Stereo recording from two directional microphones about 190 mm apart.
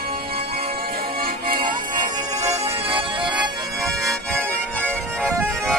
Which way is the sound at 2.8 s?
30° right (ahead or behind).